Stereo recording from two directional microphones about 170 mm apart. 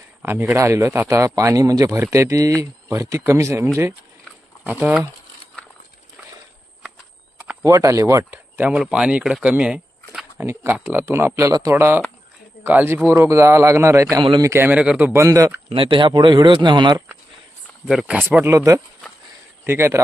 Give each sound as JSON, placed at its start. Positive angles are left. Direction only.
{"t": 0.2, "sound": "a man's voice", "side_deg": -15}
{"t": 7.6, "sound": "a man's voice", "side_deg": -20}
{"t": 14.5, "sound": "a man's voice", "side_deg": -10}
{"t": 15.7, "sound": "speech", "side_deg": -30}
{"t": 17.8, "sound": "a man's voice", "side_deg": -5}